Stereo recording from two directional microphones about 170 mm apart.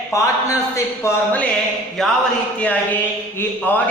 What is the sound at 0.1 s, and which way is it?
A man's voice, 20° left (ahead or behind).